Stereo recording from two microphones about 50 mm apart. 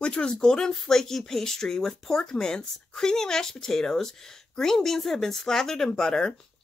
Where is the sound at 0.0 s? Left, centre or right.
Centre.